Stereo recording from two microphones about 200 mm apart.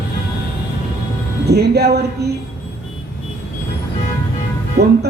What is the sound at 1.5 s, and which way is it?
Music, 55° right (ahead or behind).